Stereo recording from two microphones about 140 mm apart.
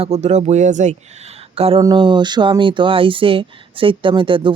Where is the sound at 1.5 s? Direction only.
45° right (ahead or behind).